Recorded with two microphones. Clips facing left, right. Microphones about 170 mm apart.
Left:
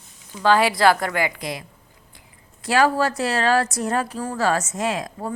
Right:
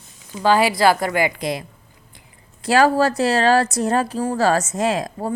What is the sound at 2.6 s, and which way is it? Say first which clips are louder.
A woman's voice: right 3 dB; 35° right (ahead or behind).